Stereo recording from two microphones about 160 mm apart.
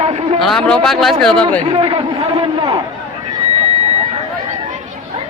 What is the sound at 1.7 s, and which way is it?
Speech, 35° right (ahead or behind).